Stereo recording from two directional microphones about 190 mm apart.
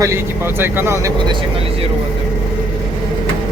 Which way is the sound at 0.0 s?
15° right (ahead or behind).